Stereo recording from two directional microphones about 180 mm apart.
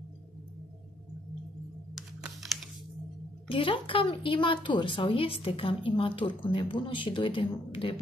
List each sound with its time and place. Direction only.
2.0 s computer keyboard: centre (ahead or behind)
3.4 s a woman's voice: 30° left (ahead or behind)